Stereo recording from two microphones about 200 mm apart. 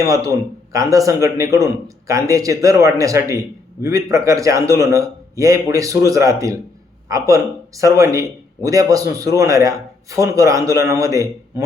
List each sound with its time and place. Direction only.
0.0 s a man's voice: 15° right (ahead or behind)